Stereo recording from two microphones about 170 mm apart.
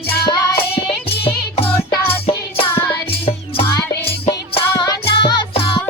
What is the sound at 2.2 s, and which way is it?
Music, 35° left (ahead or behind).